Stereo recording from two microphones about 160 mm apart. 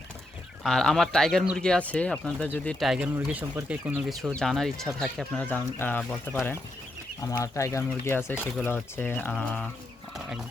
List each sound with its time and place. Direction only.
0.6 s speech: 5° left (ahead or behind)
2.8 s speech: centre (ahead or behind)